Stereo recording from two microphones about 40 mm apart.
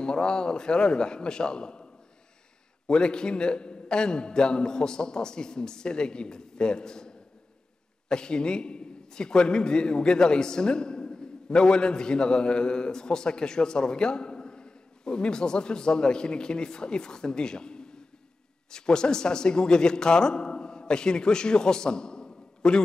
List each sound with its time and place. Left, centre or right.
0.0 s a man's voice: left
2.9 s a man's voice: left